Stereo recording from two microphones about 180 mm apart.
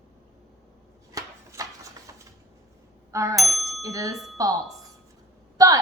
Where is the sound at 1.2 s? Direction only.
20° right (ahead or behind).